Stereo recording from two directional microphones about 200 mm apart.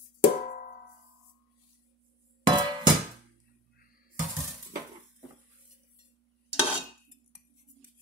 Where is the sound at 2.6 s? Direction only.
20° right (ahead or behind).